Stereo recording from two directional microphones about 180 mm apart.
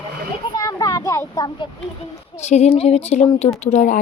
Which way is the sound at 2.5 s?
35° left (ahead or behind).